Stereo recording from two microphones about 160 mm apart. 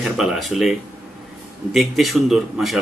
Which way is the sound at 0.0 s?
Centre (ahead or behind).